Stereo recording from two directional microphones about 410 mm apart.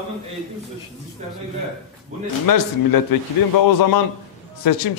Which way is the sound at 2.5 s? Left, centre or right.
Left.